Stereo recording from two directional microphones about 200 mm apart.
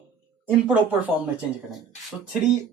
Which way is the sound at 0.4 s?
5° right (ahead or behind).